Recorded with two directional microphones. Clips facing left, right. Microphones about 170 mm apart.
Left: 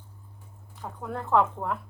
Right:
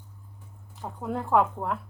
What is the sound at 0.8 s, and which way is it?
Speech, 15° right (ahead or behind).